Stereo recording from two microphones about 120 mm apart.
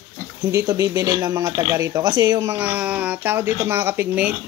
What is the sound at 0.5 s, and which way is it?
Speech, 25° right (ahead or behind).